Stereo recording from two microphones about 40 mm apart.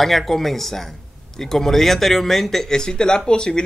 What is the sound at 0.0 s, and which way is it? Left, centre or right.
A man's voice, centre.